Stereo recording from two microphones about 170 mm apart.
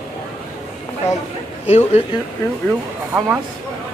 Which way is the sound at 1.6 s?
40° left (ahead or behind).